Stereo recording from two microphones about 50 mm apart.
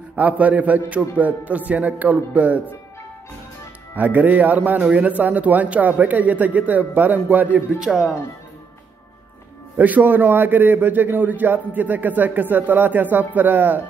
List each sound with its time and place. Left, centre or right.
0.1 s a man's voice: right
3.9 s a man's voice: right
7.8 s speech: centre
9.8 s a man's voice: right